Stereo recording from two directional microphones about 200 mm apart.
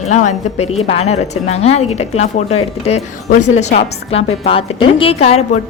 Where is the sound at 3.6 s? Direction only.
35° left (ahead or behind).